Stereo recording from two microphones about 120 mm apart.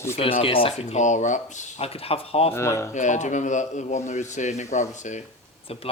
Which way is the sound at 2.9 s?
90° left.